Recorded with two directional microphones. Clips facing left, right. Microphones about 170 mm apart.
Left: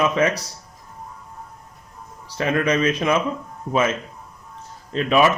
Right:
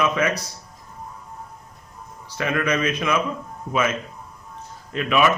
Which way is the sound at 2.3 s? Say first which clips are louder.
Left 3 dB; 35° left (ahead or behind).